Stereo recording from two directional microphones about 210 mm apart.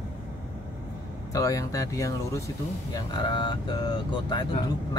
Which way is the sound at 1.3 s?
15° left (ahead or behind).